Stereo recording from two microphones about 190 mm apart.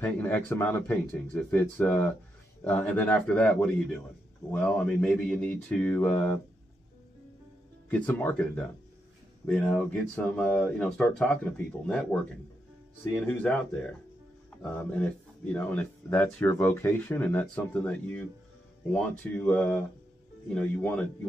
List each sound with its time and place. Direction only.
0.0 s speech: 10° left (ahead or behind)
7.9 s speech: 10° left (ahead or behind)
14.6 s speech: 5° left (ahead or behind)